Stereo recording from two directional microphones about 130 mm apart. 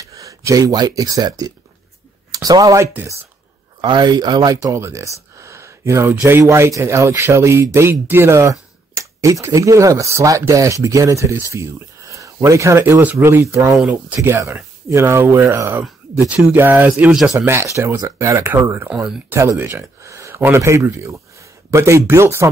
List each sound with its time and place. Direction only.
0.0 s speech: 25° right (ahead or behind)
2.9 s speech: 15° right (ahead or behind)
3.8 s speech: 35° right (ahead or behind)
13.7 s speech: 10° right (ahead or behind)
15.8 s speech: 5° right (ahead or behind); by 22.5 s 20° right (ahead or behind)